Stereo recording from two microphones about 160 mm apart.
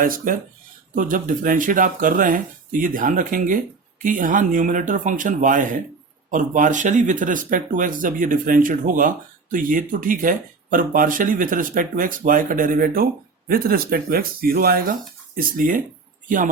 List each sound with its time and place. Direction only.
0.0 s speech: 60° right (ahead or behind)